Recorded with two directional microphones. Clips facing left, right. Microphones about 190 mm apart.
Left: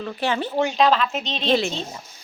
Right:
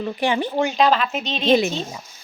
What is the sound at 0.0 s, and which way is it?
Speech, 15° right (ahead or behind).